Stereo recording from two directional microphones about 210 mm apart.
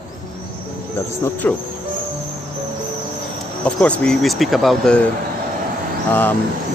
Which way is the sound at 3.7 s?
5° left (ahead or behind).